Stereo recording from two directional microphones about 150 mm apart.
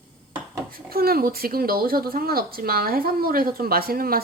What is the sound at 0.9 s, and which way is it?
Speech, 85° right.